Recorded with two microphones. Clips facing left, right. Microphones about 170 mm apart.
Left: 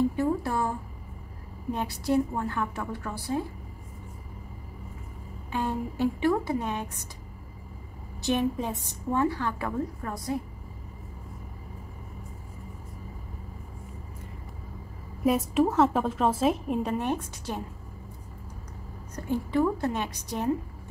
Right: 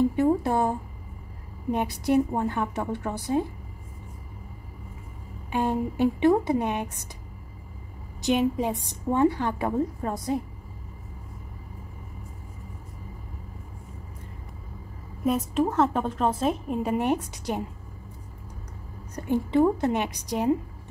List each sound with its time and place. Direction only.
0.1 s a woman's voice: 20° right (ahead or behind)
5.5 s a woman's voice: 15° right (ahead or behind)
8.2 s a woman's voice: 15° right (ahead or behind)
15.2 s a woman's voice: centre (ahead or behind)
16.8 s a woman's voice: 15° right (ahead or behind)
19.2 s a woman's voice: 20° right (ahead or behind)